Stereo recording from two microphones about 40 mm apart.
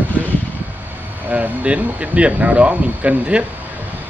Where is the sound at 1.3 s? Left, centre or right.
Right.